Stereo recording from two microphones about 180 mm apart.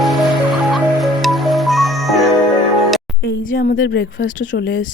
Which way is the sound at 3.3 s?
55° left (ahead or behind).